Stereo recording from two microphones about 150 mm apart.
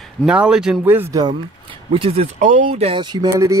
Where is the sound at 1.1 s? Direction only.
30° right (ahead or behind).